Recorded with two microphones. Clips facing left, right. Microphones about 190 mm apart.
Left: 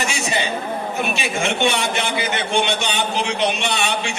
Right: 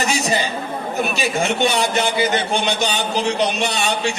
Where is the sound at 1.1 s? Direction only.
40° right (ahead or behind).